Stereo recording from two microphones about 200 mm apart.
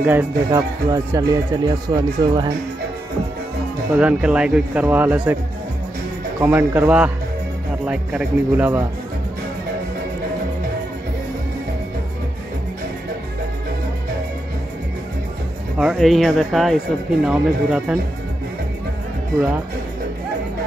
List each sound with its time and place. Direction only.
0.0 s speech: 10° right (ahead or behind)
3.9 s speech: 5° right (ahead or behind)
6.4 s speech: 10° right (ahead or behind)
15.8 s speech: centre (ahead or behind)